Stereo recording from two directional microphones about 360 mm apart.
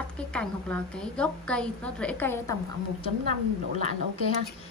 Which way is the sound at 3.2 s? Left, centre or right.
Right.